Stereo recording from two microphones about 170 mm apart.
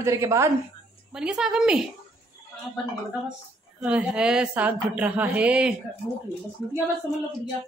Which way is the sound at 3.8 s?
5° right (ahead or behind).